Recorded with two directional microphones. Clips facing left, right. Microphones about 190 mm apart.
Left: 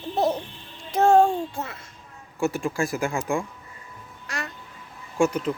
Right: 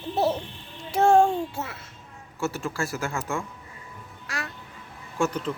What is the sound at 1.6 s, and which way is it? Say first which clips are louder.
Speech: left 1 dB; 5° right (ahead or behind).